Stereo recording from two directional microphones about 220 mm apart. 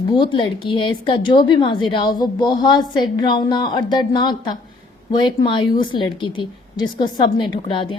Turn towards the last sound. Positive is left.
turn(degrees=20)  # may be behind; listen again after turning